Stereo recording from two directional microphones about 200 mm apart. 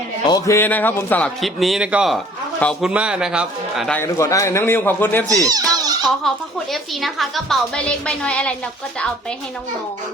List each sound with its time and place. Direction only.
0.3 s a man's voice: 15° left (ahead or behind); by 4.0 s centre (ahead or behind)
4.0 s a man's voice: 15° left (ahead or behind)
5.3 s a child's voice: 15° right (ahead or behind)
6.2 s a man's voice: centre (ahead or behind)